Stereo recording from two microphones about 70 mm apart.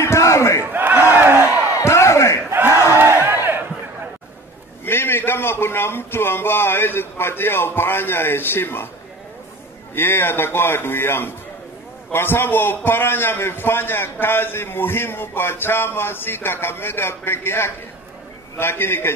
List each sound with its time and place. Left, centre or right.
0.0 s battle cry: left
0.7 s battle cry: right
1.1 s crowd: right
1.8 s crowd: left
2.5 s battle cry: right
3.0 s a sound: right
4.8 s a man's voice: left
9.9 s a man's voice: left